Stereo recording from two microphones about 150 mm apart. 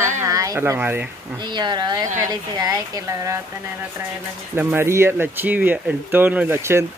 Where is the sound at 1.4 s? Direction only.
30° right (ahead or behind).